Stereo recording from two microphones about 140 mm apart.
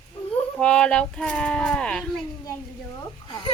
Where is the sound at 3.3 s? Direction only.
30° left (ahead or behind).